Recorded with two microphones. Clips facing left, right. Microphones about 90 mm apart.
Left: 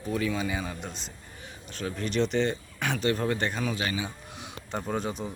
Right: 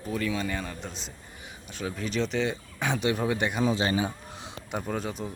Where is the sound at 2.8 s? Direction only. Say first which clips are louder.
Right 1 dB; 20° right (ahead or behind).